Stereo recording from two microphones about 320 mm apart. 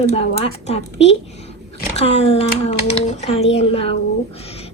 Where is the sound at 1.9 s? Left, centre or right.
Centre.